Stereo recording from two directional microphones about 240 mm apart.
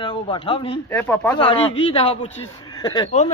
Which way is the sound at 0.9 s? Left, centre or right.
Centre.